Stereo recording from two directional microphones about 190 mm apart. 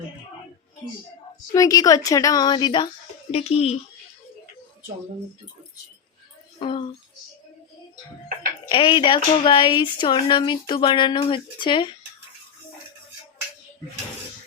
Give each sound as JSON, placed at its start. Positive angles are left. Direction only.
{"t": 1.5, "sound": "speech", "side_deg": 20}
{"t": 3.3, "sound": "speech", "side_deg": 30}
{"t": 6.6, "sound": "speech", "side_deg": 30}
{"t": 8.7, "sound": "speech", "side_deg": 25}